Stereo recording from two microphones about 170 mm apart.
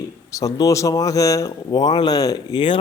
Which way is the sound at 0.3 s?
20° left (ahead or behind).